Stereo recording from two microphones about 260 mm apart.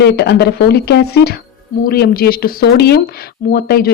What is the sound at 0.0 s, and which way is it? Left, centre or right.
A woman's voice, left.